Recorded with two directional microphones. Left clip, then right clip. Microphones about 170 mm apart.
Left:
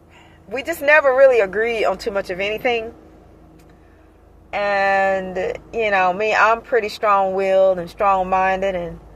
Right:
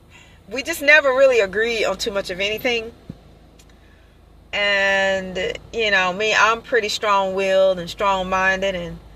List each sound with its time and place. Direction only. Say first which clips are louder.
0.5 s speech: even; 35° right (ahead or behind)
4.5 s speech: even; 45° right (ahead or behind)
5.1 s speech: left 1 dB; 30° right (ahead or behind)